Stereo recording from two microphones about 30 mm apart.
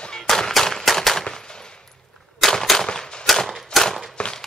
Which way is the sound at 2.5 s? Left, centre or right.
Centre.